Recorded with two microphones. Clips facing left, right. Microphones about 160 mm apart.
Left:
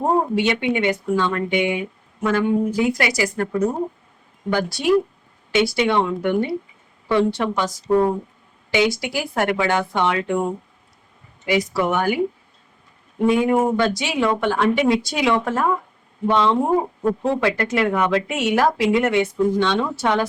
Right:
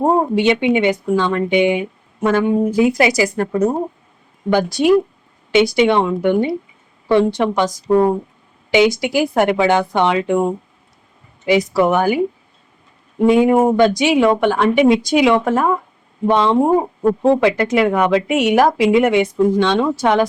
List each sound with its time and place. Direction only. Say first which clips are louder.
0.0 s speech: right 4 dB; 20° right (ahead or behind)
11.4 s speech: right 6 dB; 20° right (ahead or behind)
13.2 s speech: right 5 dB; 25° right (ahead or behind)
17.0 s speech: right 7 dB; 30° right (ahead or behind)
17.4 s speech: right 5 dB; 15° right (ahead or behind)